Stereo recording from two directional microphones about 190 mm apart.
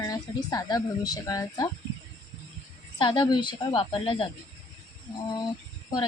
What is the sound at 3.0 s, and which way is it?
Speech, 25° left (ahead or behind).